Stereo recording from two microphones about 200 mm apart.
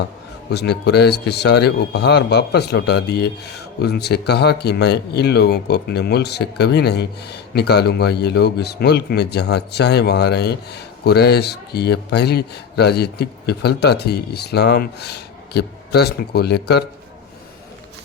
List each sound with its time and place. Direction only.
0.5 s a man's voice: 55° left (ahead or behind)